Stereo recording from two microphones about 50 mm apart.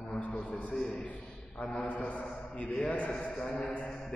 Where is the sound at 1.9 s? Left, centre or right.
Left.